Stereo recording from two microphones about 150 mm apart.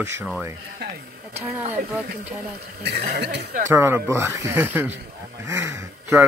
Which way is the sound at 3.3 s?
90° right.